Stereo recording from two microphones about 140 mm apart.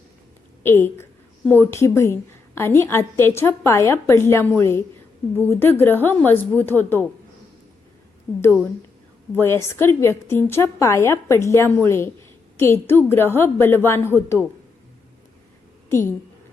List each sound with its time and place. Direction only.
0.6 s a woman's voice: 15° left (ahead or behind)
8.3 s a woman's voice: 15° left (ahead or behind)
15.9 s a woman's voice: 20° left (ahead or behind)